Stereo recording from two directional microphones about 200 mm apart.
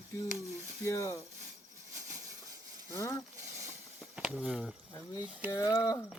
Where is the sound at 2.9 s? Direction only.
15° left (ahead or behind).